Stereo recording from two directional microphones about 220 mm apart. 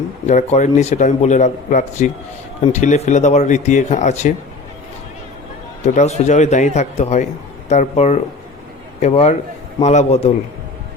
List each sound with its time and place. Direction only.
0.3 s speech: 35° left (ahead or behind)
5.8 s a man's voice: 30° left (ahead or behind)